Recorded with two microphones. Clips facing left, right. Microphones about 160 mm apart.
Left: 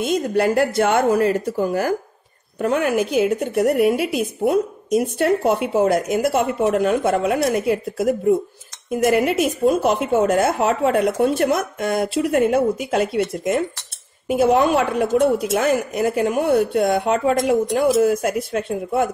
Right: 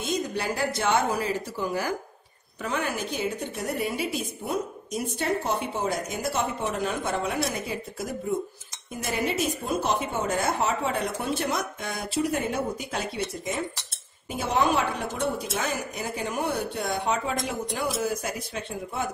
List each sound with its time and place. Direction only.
0.0 s a woman's voice: 60° left (ahead or behind)